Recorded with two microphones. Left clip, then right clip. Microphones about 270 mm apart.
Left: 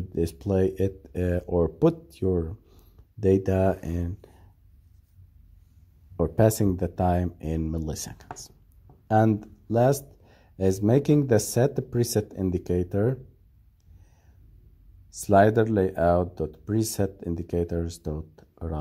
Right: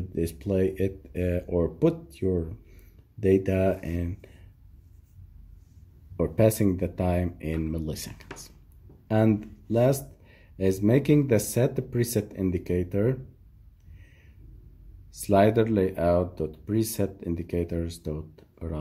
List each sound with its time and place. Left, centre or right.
0.1 s speech: left
6.1 s speech: left
15.0 s speech: left